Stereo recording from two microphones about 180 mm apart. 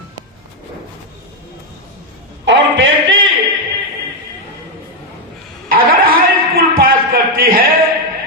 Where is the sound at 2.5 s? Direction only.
90° right.